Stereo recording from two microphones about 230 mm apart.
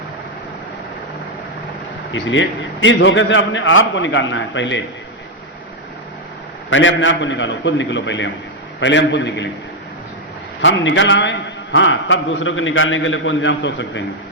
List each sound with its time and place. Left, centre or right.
2.1 s a man's voice: left
6.7 s a man's voice: left
10.6 s a man's voice: left